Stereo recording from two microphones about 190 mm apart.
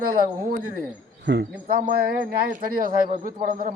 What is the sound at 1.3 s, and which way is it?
Speech, 65° right (ahead or behind).